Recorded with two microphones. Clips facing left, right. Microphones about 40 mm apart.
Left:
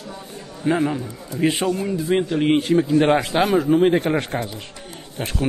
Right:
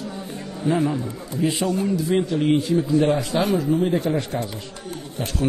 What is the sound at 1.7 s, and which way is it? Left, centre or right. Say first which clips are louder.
Speech: left 1 dB; left.